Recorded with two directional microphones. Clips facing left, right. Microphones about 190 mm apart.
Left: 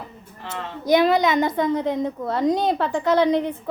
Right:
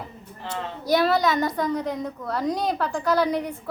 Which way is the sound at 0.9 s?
15° left (ahead or behind).